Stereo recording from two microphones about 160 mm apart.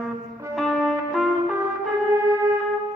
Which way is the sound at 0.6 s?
Centre (ahead or behind).